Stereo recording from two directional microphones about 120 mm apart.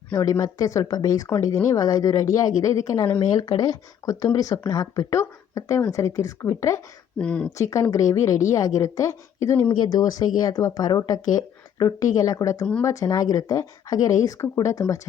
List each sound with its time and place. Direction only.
0.3 s speech: 30° left (ahead or behind)
7.2 s speech: 10° left (ahead or behind)
7.5 s speech: 25° left (ahead or behind)